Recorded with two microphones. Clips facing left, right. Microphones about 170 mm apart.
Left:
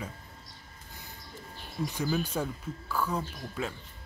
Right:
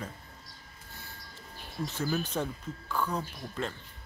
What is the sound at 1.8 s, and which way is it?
Speech, 15° left (ahead or behind).